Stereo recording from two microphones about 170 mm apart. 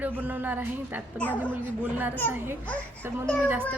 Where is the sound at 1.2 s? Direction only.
10° left (ahead or behind).